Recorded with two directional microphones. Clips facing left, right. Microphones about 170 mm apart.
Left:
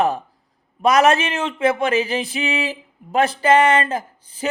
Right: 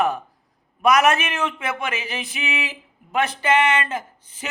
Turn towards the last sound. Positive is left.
turn(degrees=35)  # may be behind; listen again after turning